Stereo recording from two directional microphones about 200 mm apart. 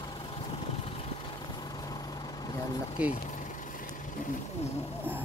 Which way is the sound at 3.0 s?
5° right (ahead or behind).